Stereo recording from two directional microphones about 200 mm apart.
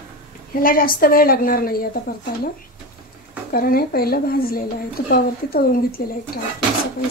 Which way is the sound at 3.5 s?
50° left (ahead or behind).